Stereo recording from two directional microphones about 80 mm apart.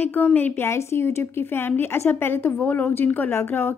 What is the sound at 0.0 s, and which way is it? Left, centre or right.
Speech, left.